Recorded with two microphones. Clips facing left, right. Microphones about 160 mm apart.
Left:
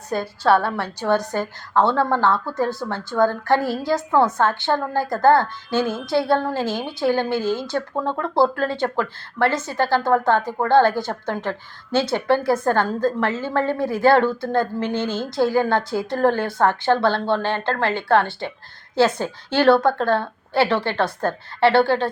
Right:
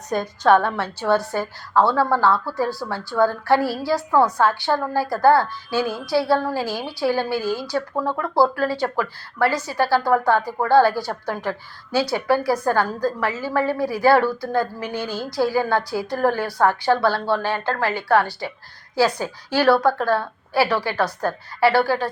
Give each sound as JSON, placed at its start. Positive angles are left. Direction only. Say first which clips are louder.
{"t": 0.1, "sound": "a woman's voice", "louder": "right 1 dB", "side_deg": -15}
{"t": 0.7, "sound": "a woman's voice", "louder": "even", "side_deg": 15}